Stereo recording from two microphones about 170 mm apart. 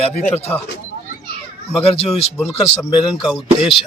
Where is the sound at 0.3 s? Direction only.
10° left (ahead or behind).